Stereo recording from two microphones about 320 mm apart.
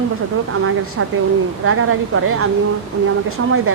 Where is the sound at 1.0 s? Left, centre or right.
Right.